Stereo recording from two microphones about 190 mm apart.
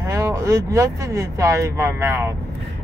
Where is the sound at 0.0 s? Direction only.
15° right (ahead or behind).